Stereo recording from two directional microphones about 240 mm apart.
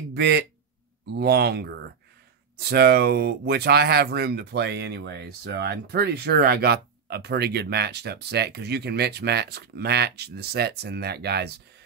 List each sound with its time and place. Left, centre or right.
0.1 s speech: right